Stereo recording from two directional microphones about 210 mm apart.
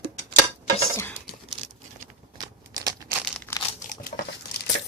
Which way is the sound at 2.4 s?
20° right (ahead or behind).